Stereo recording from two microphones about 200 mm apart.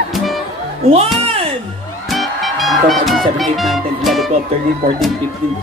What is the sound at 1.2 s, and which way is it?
Music, 30° right (ahead or behind).